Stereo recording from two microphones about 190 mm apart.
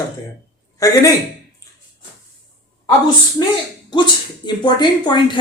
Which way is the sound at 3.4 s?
20° left (ahead or behind).